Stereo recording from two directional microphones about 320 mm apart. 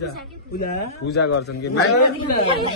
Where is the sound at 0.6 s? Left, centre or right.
Left.